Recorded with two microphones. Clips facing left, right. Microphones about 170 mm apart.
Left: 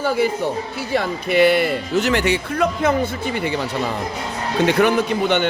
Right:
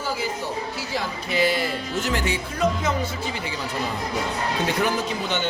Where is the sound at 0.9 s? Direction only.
60° left (ahead or behind).